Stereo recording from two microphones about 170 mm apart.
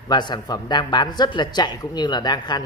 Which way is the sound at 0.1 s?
25° left (ahead or behind).